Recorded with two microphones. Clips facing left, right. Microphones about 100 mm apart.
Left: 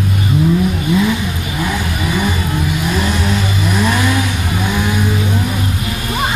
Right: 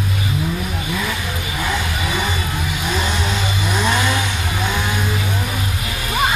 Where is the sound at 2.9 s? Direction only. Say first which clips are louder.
Left 2 dB; centre (ahead or behind).